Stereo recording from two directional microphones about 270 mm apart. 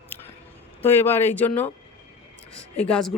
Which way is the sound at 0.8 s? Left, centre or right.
Centre.